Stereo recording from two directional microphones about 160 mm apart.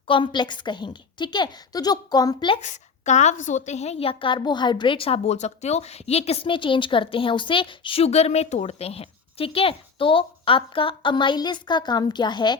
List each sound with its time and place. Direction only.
0.1 s a woman's voice: 30° left (ahead or behind)
2.6 s a woman's voice: 50° left (ahead or behind); by 12.5 s 30° left (ahead or behind)